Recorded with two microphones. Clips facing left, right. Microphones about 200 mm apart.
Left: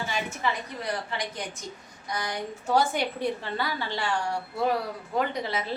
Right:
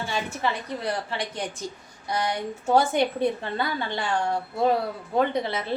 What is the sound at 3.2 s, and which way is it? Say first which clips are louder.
A woman's voice: right 4 dB; 25° right (ahead or behind).